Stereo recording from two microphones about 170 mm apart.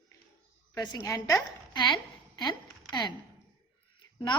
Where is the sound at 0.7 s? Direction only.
20° left (ahead or behind).